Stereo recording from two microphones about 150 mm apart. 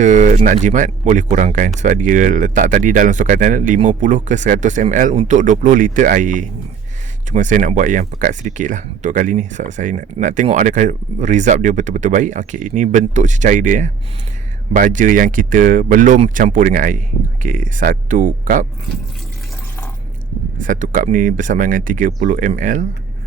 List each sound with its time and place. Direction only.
0.0 s speech: 55° right (ahead or behind)
20.6 s speech: 60° right (ahead or behind)